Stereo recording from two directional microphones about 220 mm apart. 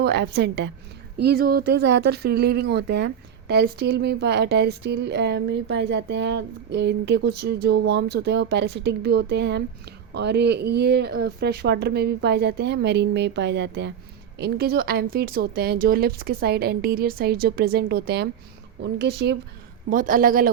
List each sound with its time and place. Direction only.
0.0 s speech: 50° right (ahead or behind)
19.9 s a man's voice: 40° right (ahead or behind)